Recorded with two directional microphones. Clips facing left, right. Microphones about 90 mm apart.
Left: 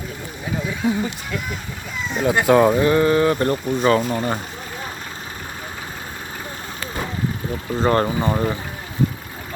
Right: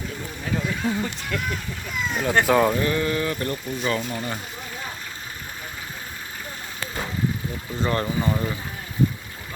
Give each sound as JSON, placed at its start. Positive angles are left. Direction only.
{"t": 0.9, "sound": "speech", "side_deg": 10}
{"t": 2.7, "sound": "speech", "side_deg": 30}
{"t": 7.8, "sound": "speech", "side_deg": 40}